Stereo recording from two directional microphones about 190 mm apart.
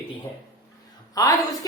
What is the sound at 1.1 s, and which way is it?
Speech, 20° left (ahead or behind).